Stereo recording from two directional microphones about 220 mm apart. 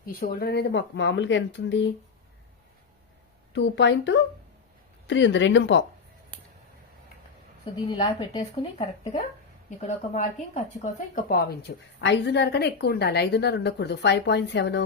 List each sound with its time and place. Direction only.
0.1 s speech: 45° left (ahead or behind)
3.5 s speech: 55° left (ahead or behind)
7.6 s speech: 20° left (ahead or behind); by 14.8 s 50° left (ahead or behind)